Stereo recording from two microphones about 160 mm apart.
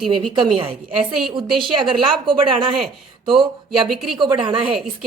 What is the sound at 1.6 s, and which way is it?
Speech, 30° right (ahead or behind).